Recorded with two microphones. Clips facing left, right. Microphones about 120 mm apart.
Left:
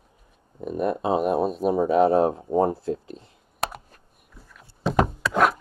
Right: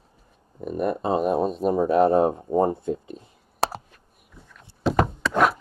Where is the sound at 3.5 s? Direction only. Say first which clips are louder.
Right 4 dB; 30° right (ahead or behind).